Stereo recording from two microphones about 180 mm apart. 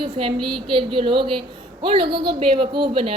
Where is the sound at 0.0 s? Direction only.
30° right (ahead or behind).